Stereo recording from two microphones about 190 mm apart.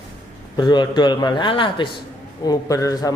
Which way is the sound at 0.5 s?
25° left (ahead or behind).